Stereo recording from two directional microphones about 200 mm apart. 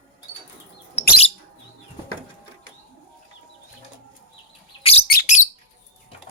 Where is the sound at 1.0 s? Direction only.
35° left (ahead or behind).